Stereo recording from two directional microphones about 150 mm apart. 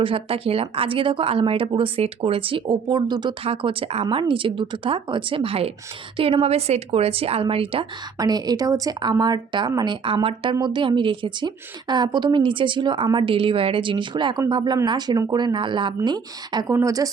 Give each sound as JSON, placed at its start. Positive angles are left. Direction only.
{"t": 0.0, "sound": "a woman's voice", "side_deg": -35}